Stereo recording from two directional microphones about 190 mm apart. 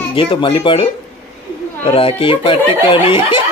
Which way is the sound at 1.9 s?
30° left (ahead or behind).